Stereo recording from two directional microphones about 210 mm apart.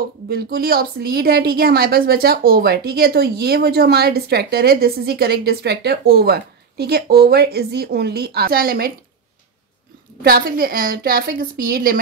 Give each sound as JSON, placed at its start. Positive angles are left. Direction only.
{"t": 0.3, "sound": "speech", "side_deg": -45}
{"t": 10.2, "sound": "speech", "side_deg": -45}